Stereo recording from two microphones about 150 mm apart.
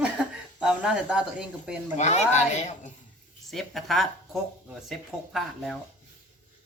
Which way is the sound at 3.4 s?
Centre (ahead or behind).